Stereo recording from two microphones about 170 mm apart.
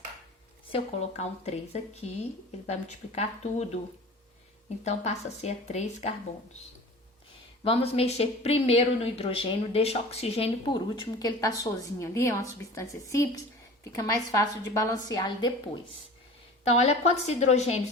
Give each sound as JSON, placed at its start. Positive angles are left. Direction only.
{"t": 0.7, "sound": "speech", "side_deg": 40}
{"t": 4.8, "sound": "speech", "side_deg": 40}
{"t": 7.6, "sound": "a woman's voice", "side_deg": 35}
{"t": 16.6, "sound": "speech", "side_deg": 40}